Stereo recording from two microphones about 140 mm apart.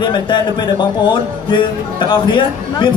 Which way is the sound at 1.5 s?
35° left (ahead or behind).